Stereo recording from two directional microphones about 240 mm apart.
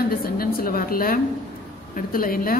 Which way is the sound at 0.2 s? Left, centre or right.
Left.